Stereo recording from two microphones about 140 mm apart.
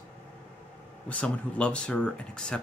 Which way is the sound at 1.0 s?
10° left (ahead or behind).